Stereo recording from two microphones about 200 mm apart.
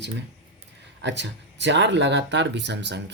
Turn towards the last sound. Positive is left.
turn(degrees=-60)  # may be behind; listen again after turning